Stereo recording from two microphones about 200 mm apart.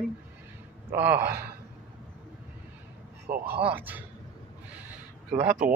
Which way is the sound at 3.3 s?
35° right (ahead or behind).